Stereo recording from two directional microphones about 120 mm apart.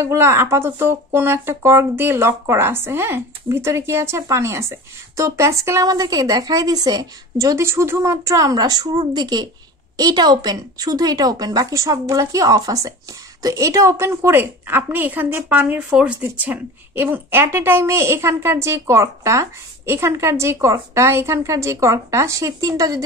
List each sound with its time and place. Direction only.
0.0 s speech: 25° right (ahead or behind)